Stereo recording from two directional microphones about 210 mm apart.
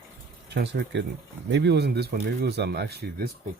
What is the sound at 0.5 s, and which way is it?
Speech, 55° right (ahead or behind).